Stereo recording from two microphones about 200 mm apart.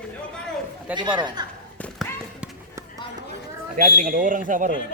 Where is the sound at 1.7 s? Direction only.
5° left (ahead or behind).